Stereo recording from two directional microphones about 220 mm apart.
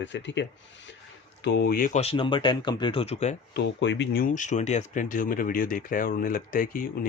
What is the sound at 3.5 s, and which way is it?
Speech, 50° left (ahead or behind).